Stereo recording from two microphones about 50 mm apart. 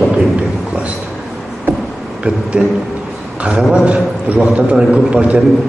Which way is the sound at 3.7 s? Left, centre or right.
Right.